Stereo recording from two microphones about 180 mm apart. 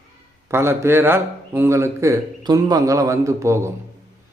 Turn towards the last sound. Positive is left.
turn(degrees=-15)  # may be behind; listen again after turning